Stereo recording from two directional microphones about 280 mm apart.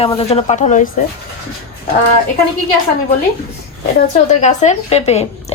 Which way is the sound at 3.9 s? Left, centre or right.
Left.